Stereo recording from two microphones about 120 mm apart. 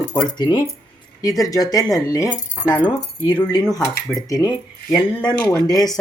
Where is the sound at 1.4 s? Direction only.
30° left (ahead or behind).